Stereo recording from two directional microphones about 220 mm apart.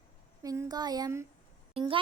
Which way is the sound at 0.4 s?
15° right (ahead or behind).